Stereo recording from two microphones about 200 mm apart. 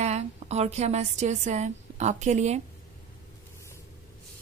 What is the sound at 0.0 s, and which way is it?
A woman's voice, 35° right (ahead or behind).